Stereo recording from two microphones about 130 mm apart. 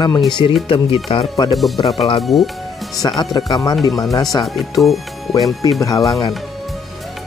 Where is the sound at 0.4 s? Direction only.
40° left (ahead or behind).